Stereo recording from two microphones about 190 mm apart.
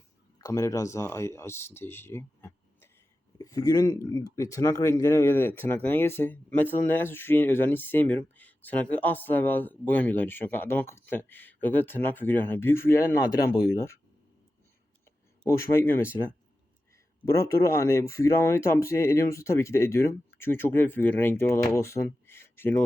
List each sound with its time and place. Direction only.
0.4 s speech: 15° left (ahead or behind)
15.4 s speech: 15° left (ahead or behind)
17.3 s speech: 15° left (ahead or behind)